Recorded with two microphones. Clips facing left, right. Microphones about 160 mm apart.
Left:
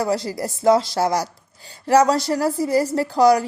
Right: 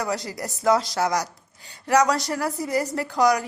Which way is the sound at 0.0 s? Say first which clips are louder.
Left 6 dB; 30° left (ahead or behind).